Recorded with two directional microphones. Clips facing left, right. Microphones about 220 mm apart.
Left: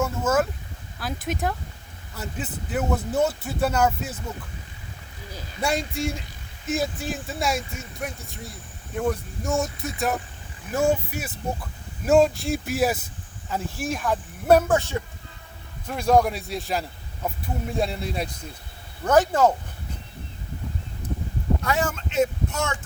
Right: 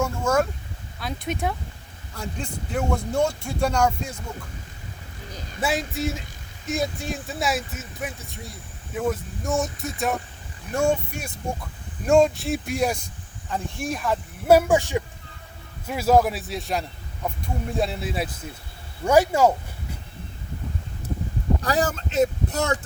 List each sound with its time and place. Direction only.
0.0 s speech: 5° left (ahead or behind)
5.5 s speech: centre (ahead or behind)
21.6 s speech: 35° right (ahead or behind)